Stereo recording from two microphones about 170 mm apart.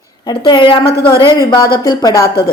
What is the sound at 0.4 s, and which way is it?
Speech, 30° left (ahead or behind).